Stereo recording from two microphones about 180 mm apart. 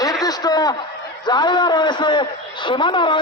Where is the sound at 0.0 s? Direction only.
20° left (ahead or behind).